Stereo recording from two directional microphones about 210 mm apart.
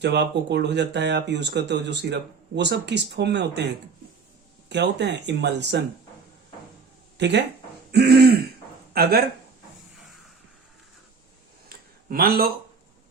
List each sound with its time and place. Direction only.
0.0 s speech: 55° right (ahead or behind)
4.7 s speech: 55° right (ahead or behind)
7.2 s speech: 55° right (ahead or behind)
7.9 s throat clearing: 50° right (ahead or behind)
8.9 s speech: 45° right (ahead or behind)
12.0 s throat clearing: 45° right (ahead or behind)